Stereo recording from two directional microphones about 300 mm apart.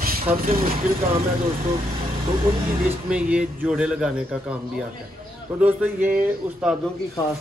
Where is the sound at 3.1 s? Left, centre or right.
Centre.